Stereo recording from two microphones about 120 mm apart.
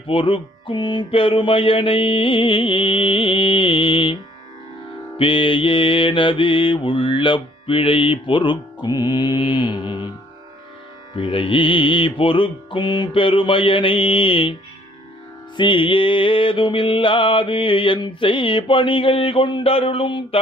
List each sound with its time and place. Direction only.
0.0 s mantra: 50° left (ahead or behind)
11.1 s mantra: 45° left (ahead or behind)